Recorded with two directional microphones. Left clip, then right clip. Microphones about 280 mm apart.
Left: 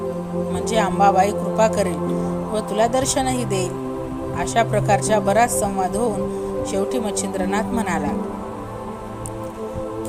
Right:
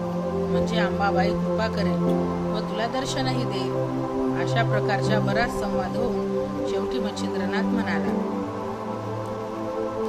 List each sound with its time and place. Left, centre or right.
0.6 s speech: left
7.5 s speech: left